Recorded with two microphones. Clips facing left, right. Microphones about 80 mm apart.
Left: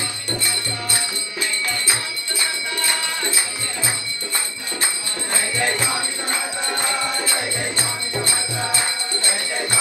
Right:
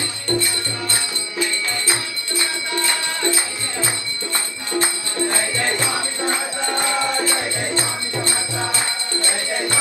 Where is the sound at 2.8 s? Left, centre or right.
Right.